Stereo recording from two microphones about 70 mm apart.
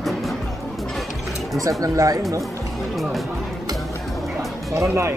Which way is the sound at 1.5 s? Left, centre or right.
Right.